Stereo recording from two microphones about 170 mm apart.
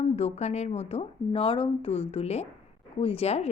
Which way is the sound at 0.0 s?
40° left (ahead or behind).